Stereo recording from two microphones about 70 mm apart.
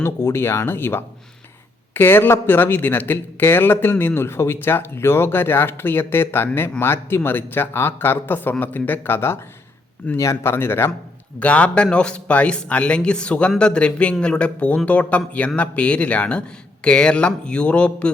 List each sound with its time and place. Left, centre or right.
0.0 s speech: left
11.3 s a man's voice: centre